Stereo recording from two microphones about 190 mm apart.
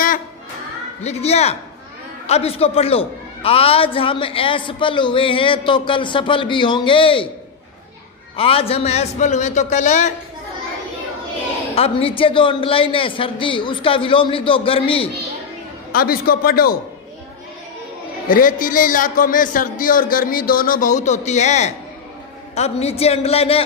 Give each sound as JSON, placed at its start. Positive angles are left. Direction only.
{"t": 1.0, "sound": "a man's voice", "side_deg": 35}
{"t": 8.4, "sound": "a man's voice", "side_deg": 30}
{"t": 11.7, "sound": "a man's voice", "side_deg": 30}
{"t": 15.9, "sound": "a man's voice", "side_deg": 50}
{"t": 18.3, "sound": "a man's voice", "side_deg": 45}